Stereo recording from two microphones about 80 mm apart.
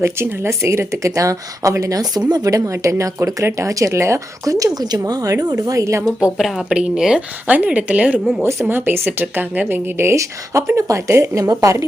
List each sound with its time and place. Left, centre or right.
0.0 s speech: right
6.1 s speech: centre
8.6 s speech: right